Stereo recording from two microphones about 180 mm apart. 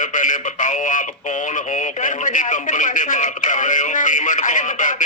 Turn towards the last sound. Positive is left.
turn(degrees=45)  # may be behind; listen again after turning